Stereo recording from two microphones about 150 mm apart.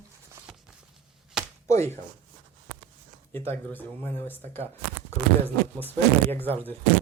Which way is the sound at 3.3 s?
15° left (ahead or behind).